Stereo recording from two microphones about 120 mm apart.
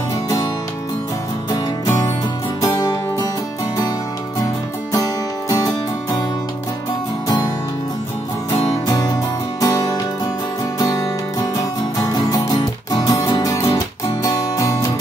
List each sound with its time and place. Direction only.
1.5 s music: 30° left (ahead or behind)
4.9 s music: 30° left (ahead or behind)
8.8 s music: 30° left (ahead or behind)
12.0 s music: 30° left (ahead or behind)